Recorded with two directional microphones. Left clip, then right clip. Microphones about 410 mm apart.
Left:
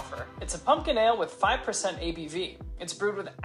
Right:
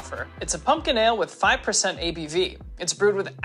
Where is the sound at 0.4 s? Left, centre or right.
Right.